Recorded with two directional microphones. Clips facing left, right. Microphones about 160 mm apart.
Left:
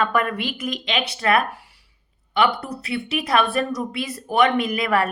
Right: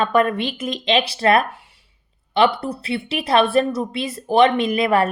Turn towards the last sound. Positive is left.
turn(degrees=-25)  # may be behind; listen again after turning